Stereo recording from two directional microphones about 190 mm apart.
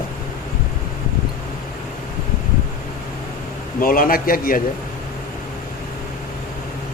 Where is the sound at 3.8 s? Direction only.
50° left (ahead or behind).